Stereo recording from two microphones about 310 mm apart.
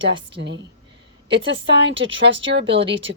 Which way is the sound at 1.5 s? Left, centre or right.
Right.